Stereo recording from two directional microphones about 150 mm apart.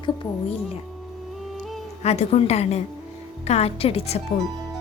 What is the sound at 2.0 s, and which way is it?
A woman's voice, 45° left (ahead or behind).